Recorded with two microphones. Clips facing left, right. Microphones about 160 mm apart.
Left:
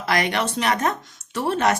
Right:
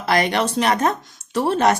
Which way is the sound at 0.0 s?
35° right (ahead or behind).